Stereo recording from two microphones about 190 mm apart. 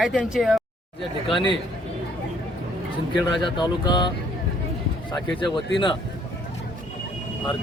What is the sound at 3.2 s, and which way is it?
Speech, 25° left (ahead or behind).